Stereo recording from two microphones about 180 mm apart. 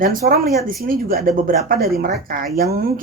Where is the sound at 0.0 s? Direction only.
55° right (ahead or behind).